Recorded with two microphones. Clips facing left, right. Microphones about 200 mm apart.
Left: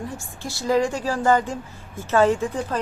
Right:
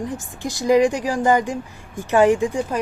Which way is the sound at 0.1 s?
15° right (ahead or behind).